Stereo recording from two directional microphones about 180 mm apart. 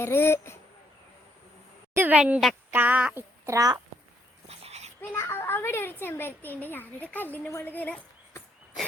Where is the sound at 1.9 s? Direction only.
10° right (ahead or behind).